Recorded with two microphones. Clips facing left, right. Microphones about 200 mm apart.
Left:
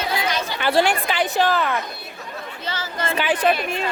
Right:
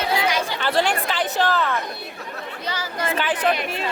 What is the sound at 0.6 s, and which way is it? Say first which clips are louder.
Speech: left 5 dB; 10° left (ahead or behind).